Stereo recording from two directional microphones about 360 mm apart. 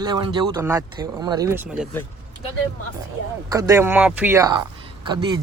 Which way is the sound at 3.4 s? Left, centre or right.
Centre.